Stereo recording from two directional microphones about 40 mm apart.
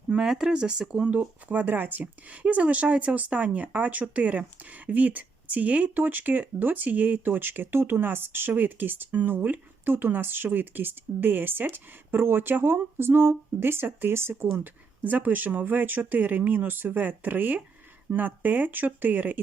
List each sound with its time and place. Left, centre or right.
0.3 s speech: centre
1.1 s speech: right
2.2 s speech: right
7.3 s speech: right
14.6 s speech: right